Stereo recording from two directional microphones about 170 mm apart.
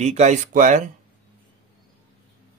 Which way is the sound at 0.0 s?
40° right (ahead or behind).